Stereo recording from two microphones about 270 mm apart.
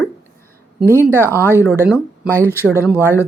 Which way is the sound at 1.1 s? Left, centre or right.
Centre.